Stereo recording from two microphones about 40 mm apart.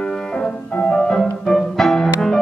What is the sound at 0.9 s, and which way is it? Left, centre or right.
Music, left.